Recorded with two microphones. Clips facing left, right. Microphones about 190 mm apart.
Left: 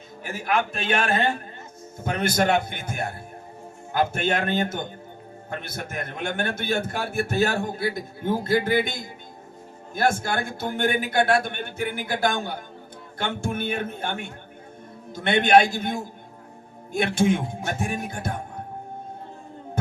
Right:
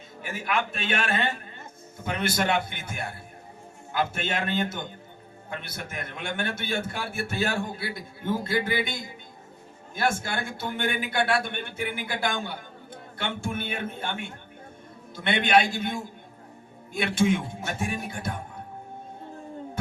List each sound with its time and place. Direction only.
0.2 s a man's voice: 40° left (ahead or behind)